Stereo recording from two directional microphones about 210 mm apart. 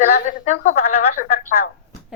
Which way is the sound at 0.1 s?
35° left (ahead or behind).